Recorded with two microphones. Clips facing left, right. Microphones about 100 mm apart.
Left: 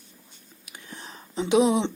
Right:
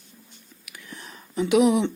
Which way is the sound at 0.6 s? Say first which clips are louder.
Even; 30° left (ahead or behind).